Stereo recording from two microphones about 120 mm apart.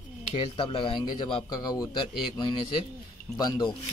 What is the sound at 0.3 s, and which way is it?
Speech, 45° left (ahead or behind).